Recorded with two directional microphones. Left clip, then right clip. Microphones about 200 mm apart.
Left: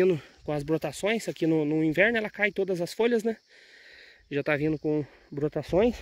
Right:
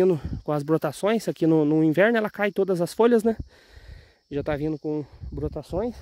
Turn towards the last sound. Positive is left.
turn(degrees=10)  # may be behind; listen again after turning